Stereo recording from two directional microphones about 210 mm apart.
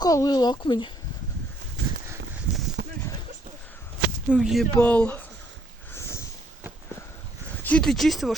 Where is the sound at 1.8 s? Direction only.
55° right (ahead or behind).